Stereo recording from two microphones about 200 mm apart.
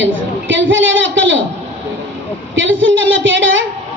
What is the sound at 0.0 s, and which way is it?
A woman's voice, 70° right (ahead or behind).